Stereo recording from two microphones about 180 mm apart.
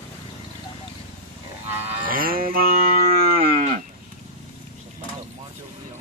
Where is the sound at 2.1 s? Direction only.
55° right (ahead or behind).